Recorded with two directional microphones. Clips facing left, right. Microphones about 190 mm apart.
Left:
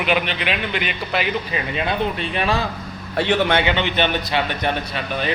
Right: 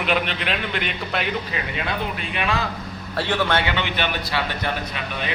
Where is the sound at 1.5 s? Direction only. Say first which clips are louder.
Left 4 dB; 25° left (ahead or behind).